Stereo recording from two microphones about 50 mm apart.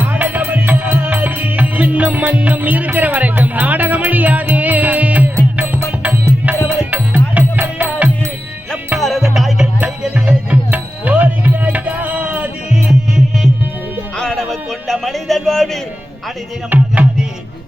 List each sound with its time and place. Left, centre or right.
0.0 s music: right
2.3 s speech: right
4.5 s music: right
6.9 s music: right
9.0 s music: centre
10.2 s music: right
12.9 s music: centre
14.2 s music: centre
15.0 s a sound: centre
16.6 s music: right